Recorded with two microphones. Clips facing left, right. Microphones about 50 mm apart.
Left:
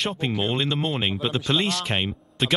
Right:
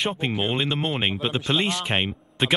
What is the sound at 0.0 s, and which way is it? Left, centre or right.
Speech, centre.